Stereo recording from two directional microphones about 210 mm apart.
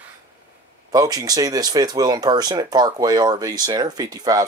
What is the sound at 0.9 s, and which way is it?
Speech, 20° right (ahead or behind).